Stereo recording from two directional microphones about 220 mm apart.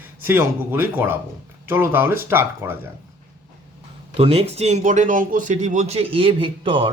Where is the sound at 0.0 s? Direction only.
10° right (ahead or behind).